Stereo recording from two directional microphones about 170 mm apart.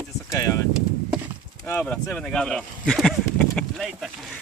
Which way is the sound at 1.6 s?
10° left (ahead or behind).